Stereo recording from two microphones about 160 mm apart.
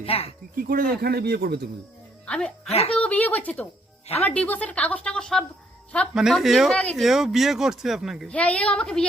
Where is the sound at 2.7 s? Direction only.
40° left (ahead or behind).